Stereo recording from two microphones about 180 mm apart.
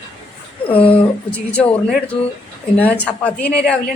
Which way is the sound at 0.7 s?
30° left (ahead or behind).